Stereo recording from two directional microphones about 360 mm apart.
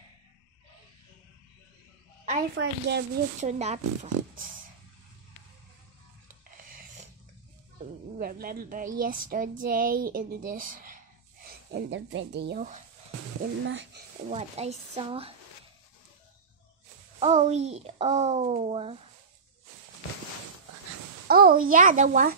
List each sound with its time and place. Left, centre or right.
2.2 s a woman's voice: right
6.5 s dog: right
8.2 s speech: right
14.3 s speech: centre
17.2 s speech: centre
21.3 s speech: right